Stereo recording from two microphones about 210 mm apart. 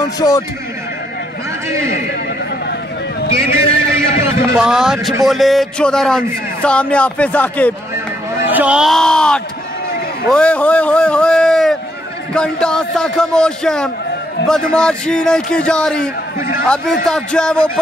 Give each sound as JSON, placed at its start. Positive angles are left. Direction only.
{"t": 3.5, "sound": "a man's voice", "side_deg": -15}
{"t": 7.9, "sound": "a sound", "side_deg": -10}
{"t": 10.3, "sound": "a man's voice", "side_deg": 5}